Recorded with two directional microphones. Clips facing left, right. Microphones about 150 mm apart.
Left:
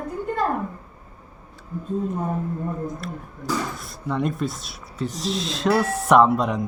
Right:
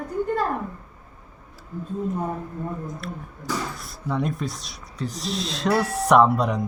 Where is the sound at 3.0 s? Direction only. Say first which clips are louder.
Left 2 dB; centre (ahead or behind).